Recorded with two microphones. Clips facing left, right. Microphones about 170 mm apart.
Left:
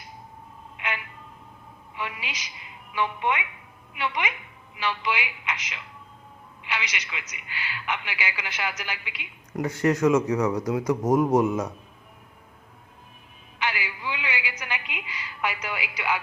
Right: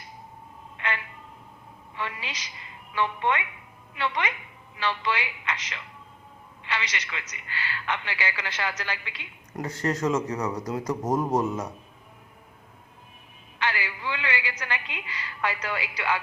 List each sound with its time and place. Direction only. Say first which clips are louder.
2.0 s a sound: even; 10° left (ahead or behind)
2.9 s a woman's voice: even; 10° left (ahead or behind)
10.2 s a woman's voice: left 5 dB; centre (ahead or behind)
13.6 s a woman's voice: even; 10° left (ahead or behind)